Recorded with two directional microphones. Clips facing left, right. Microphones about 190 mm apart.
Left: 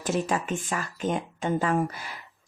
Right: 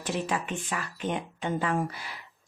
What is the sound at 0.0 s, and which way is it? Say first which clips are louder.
Speech: left 4 dB; 45° left (ahead or behind).